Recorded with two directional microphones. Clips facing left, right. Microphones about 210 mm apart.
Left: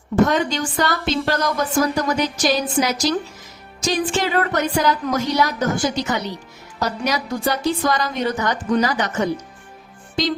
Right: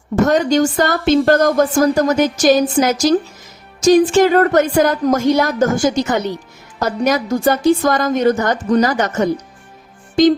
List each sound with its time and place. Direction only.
0.3 s speech: 45° right (ahead or behind)